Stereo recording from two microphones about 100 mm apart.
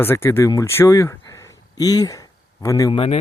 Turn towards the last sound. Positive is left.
turn(degrees=65)  # may be behind; listen again after turning